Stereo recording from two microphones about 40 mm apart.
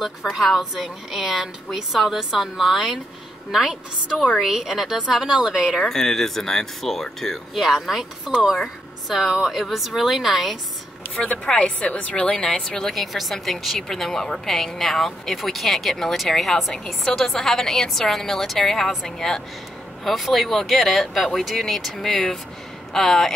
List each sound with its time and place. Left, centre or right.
0.4 s a woman's voice: centre
4.4 s a woman's voice: centre
5.8 s a woman's voice: centre
7.5 s a woman's voice: centre
11.4 s a woman's voice: left
12.3 s a woman's voice: centre
16.7 s a woman's voice: centre
20.1 s a woman's voice: centre